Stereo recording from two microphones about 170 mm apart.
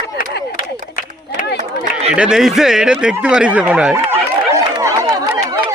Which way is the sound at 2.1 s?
5° right (ahead or behind).